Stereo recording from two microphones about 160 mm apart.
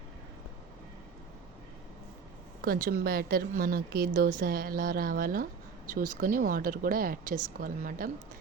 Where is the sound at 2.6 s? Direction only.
65° right (ahead or behind).